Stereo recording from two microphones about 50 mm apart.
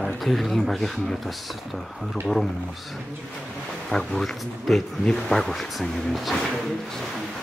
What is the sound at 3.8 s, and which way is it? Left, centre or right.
A man's voice, centre.